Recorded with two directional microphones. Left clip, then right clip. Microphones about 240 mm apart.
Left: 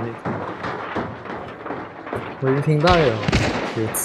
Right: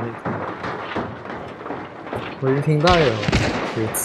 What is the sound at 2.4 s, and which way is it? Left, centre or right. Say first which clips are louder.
Speech: even; centre.